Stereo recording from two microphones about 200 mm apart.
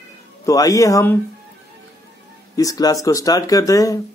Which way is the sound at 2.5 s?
20° left (ahead or behind).